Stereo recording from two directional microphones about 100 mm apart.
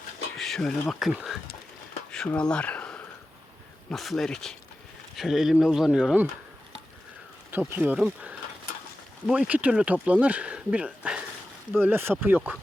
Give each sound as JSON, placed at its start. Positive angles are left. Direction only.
{"t": 0.3, "sound": "speech", "side_deg": 5}
{"t": 2.0, "sound": "a sound", "side_deg": 10}
{"t": 3.8, "sound": "speech", "side_deg": 0}
{"t": 7.8, "sound": "speech", "side_deg": -10}
{"t": 11.7, "sound": "speech", "side_deg": -20}